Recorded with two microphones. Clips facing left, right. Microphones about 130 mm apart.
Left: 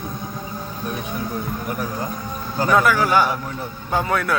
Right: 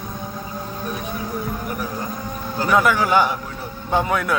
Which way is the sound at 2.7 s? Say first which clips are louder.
Even; 20° right (ahead or behind).